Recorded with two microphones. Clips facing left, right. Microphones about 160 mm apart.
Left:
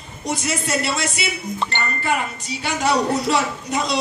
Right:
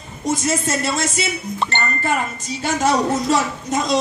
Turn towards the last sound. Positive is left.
turn(degrees=-45)  # may be behind; listen again after turning